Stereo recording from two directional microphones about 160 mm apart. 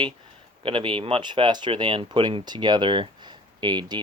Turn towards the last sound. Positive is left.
turn(degrees=-25)  # may be behind; listen again after turning